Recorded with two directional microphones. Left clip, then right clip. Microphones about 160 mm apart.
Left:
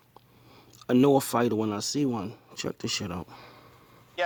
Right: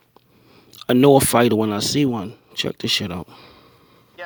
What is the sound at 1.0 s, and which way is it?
Speech, 40° right (ahead or behind).